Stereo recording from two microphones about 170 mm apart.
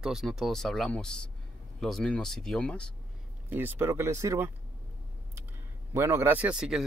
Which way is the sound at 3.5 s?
10° right (ahead or behind).